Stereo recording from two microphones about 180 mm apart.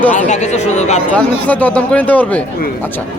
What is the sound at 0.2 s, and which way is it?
Speech, 40° left (ahead or behind).